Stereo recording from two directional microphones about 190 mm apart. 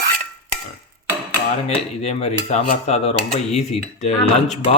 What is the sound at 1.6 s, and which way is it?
Cutlery, 35° left (ahead or behind).